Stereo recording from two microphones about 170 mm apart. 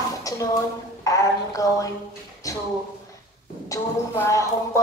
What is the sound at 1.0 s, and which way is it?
Speech, 20° left (ahead or behind).